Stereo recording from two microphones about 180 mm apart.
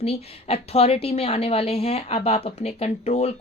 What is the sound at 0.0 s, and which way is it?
A woman's voice, 35° left (ahead or behind).